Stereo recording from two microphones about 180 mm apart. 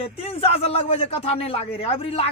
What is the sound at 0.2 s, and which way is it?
A man's voice, 35° left (ahead or behind).